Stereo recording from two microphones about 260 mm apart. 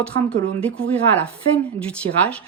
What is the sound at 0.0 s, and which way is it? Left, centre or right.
A woman's voice, centre.